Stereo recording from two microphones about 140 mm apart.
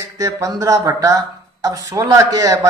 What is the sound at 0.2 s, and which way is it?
Speech, 25° right (ahead or behind).